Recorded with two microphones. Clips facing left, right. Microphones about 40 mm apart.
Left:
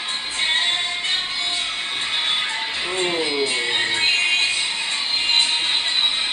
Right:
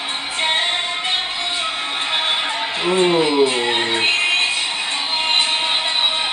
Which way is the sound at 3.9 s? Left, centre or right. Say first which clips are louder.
Right 2 dB; right.